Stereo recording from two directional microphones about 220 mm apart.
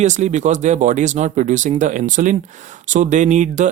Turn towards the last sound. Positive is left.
turn(degrees=-35)  # may be behind; listen again after turning